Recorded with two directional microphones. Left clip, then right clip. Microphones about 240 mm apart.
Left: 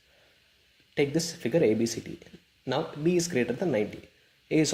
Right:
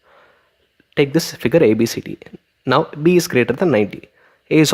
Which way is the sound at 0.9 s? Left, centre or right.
Right.